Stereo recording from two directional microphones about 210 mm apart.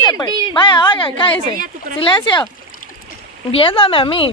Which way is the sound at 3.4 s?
25° left (ahead or behind).